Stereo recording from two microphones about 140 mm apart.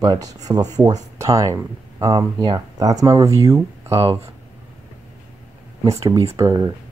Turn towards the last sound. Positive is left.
turn(degrees=-25)  # may be behind; listen again after turning